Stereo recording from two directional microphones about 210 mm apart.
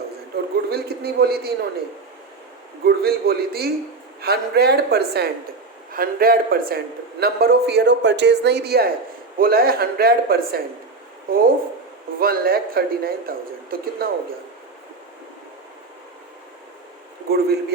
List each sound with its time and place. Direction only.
0.7 s a man's voice: 50° right (ahead or behind)
2.8 s a man's voice: 45° right (ahead or behind)
17.2 s a man's voice: 50° right (ahead or behind)